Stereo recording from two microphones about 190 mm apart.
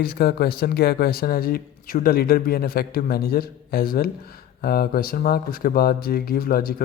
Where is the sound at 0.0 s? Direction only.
55° left (ahead or behind).